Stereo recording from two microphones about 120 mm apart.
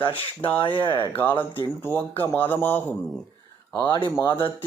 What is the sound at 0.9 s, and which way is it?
Speech, 15° left (ahead or behind).